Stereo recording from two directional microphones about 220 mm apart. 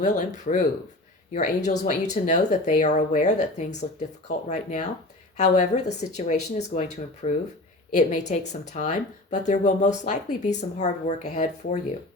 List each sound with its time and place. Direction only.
0.0 s speech: 35° left (ahead or behind)